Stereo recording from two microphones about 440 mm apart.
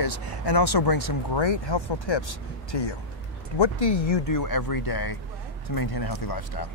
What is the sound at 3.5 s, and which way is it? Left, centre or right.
Speech, left.